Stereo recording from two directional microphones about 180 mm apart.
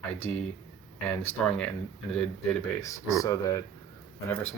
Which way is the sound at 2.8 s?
15° left (ahead or behind).